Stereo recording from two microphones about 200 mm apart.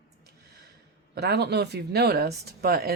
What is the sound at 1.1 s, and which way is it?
Speech, 55° right (ahead or behind).